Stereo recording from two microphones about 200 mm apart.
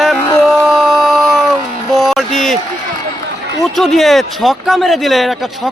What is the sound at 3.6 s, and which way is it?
Speech, centre (ahead or behind).